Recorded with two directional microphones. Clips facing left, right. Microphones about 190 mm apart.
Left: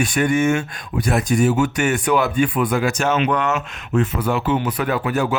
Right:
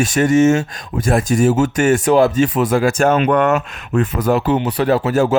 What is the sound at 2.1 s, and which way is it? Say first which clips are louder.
Speech: right 4 dB; 30° right (ahead or behind).